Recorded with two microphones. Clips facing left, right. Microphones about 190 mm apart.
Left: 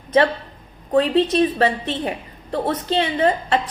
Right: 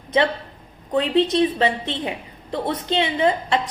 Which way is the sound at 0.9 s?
20° right (ahead or behind).